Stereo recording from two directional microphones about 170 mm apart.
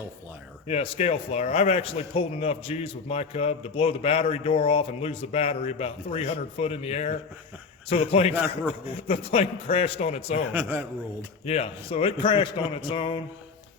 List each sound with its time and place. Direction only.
0.7 s a man's voice: 35° left (ahead or behind)
10.5 s a man's voice: 10° right (ahead or behind)
11.4 s a man's voice: 35° left (ahead or behind)